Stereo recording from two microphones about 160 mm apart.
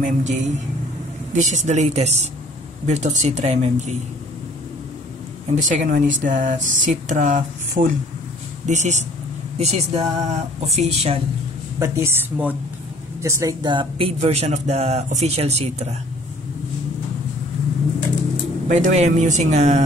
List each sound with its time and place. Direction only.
0.0 s speech: 50° right (ahead or behind)
5.5 s speech: 50° right (ahead or behind)
8.6 s speech: 45° right (ahead or behind)
11.8 s a woman's voice: 15° right (ahead or behind); by 16.0 s 40° right (ahead or behind)
18.7 s speech: 50° right (ahead or behind)